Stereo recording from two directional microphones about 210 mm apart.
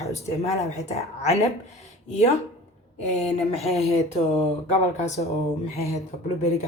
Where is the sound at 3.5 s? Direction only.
30° left (ahead or behind).